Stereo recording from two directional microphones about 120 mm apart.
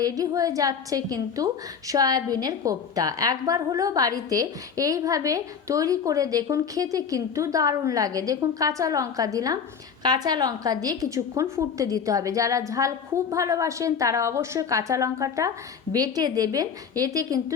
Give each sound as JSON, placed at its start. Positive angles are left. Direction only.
{"t": 0.0, "sound": "a woman's voice", "side_deg": -30}